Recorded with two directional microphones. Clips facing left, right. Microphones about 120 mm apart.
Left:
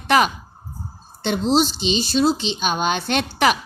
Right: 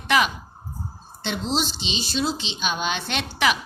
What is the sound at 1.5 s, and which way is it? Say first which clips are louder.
Speech: left 8 dB; 45° left (ahead or behind).